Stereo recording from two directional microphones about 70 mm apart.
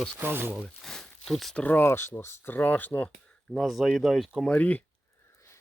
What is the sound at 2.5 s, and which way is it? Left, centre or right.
Speech, left.